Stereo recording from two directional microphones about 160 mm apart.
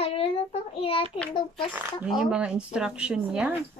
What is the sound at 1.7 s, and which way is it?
A woman's voice, 5° right (ahead or behind).